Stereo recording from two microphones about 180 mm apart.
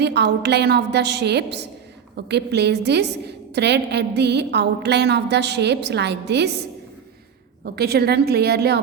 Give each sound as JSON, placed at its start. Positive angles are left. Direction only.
{"t": 0.0, "sound": "a woman's voice", "side_deg": -70}
{"t": 7.6, "sound": "a woman's voice", "side_deg": -60}